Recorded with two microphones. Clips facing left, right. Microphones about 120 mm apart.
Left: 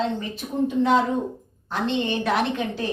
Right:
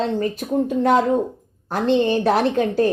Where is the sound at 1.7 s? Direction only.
40° right (ahead or behind).